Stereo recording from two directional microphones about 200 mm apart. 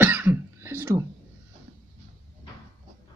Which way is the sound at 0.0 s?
10° right (ahead or behind).